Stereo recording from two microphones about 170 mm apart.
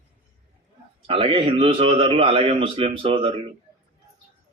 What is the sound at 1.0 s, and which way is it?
A man's voice, 30° right (ahead or behind).